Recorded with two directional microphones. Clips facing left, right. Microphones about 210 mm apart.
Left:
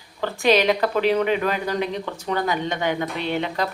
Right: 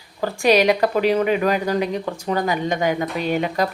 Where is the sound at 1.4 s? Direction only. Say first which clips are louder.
Right 4 dB; 10° right (ahead or behind).